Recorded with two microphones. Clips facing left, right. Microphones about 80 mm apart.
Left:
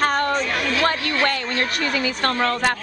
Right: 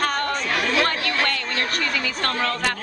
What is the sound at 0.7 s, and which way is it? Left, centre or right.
Speech, centre.